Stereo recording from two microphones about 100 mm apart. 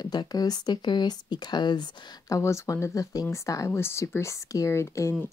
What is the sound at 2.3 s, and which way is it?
Speech, 30° left (ahead or behind).